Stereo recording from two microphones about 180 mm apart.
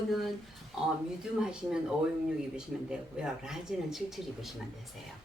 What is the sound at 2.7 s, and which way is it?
Speech, 5° right (ahead or behind).